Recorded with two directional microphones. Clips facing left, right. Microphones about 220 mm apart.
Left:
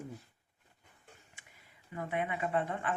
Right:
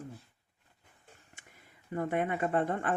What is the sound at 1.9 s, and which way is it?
Speech, 45° right (ahead or behind).